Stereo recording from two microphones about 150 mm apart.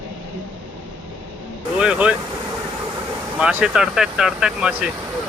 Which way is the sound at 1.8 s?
5° right (ahead or behind).